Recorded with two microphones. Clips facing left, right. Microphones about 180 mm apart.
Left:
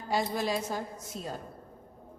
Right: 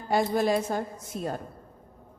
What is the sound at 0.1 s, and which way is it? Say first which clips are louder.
A woman's voice: right 6 dB; 55° right (ahead or behind).